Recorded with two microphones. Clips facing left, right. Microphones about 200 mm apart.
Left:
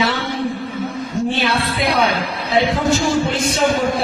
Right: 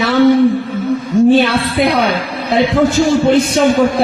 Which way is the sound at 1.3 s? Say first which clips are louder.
Right 7 dB; 55° right (ahead or behind).